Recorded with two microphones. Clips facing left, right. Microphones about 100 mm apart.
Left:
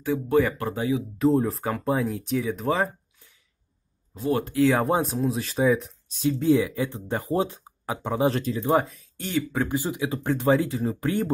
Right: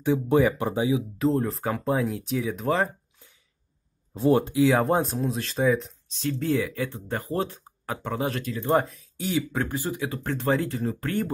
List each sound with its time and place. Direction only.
0.0 s speech: 20° right (ahead or behind)
1.1 s speech: centre (ahead or behind)
4.1 s speech: 30° right (ahead or behind)
4.7 s speech: centre (ahead or behind)
6.2 s speech: 15° left (ahead or behind)
8.3 s speech: 30° left (ahead or behind)
8.6 s speech: centre (ahead or behind)
9.7 s speech: 15° left (ahead or behind)